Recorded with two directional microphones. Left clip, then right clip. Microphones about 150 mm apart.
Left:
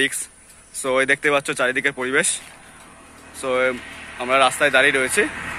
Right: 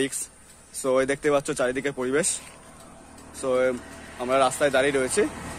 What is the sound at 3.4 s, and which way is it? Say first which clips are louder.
Speech: left 3 dB; 5° right (ahead or behind).